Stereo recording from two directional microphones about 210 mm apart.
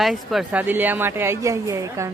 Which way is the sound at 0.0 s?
Centre (ahead or behind).